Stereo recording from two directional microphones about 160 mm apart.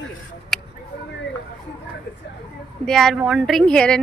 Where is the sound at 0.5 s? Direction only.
Centre (ahead or behind).